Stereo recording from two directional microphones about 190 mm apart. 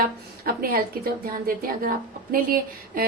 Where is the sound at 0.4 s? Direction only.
50° right (ahead or behind).